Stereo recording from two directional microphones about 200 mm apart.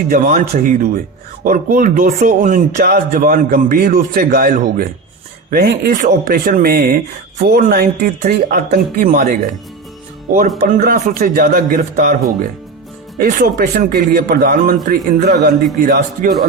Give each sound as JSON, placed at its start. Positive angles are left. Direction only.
{"t": 0.1, "sound": "speech", "side_deg": -50}
{"t": 10.6, "sound": "speech", "side_deg": -45}